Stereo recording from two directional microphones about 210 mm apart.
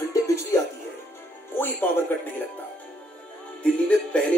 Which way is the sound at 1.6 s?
10° left (ahead or behind).